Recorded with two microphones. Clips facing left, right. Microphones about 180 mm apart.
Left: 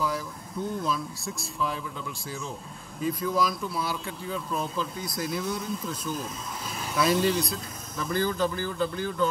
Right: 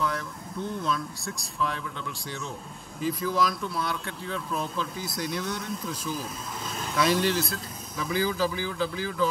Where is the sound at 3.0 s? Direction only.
Centre (ahead or behind).